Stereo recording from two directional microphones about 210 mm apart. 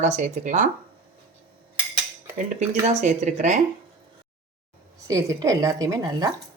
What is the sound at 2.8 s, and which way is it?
Speech, 35° right (ahead or behind).